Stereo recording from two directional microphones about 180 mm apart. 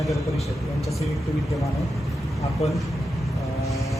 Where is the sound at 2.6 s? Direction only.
35° left (ahead or behind).